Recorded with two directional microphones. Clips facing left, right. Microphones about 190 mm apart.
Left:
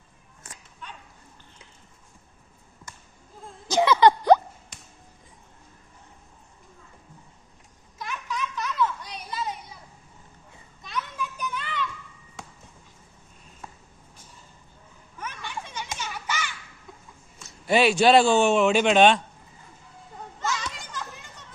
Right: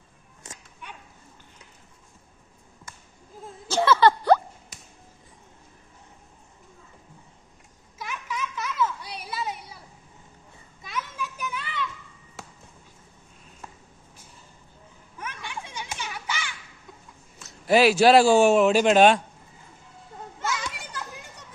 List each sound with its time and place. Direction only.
3.7 s a sound: 15° left (ahead or behind)
7.9 s a sound: 10° right (ahead or behind)
10.8 s children playing: 5° right (ahead or behind)
15.2 s children playing: 10° right (ahead or behind)
17.4 s a man's voice: centre (ahead or behind)
20.4 s children playing: 5° right (ahead or behind)